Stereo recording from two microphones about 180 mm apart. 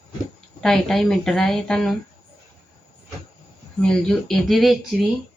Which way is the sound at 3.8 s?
5° left (ahead or behind).